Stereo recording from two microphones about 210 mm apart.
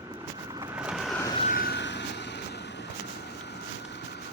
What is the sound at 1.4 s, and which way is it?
Vehicle, 40° left (ahead or behind).